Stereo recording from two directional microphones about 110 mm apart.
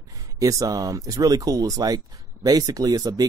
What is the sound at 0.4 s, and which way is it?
Speech, 30° right (ahead or behind).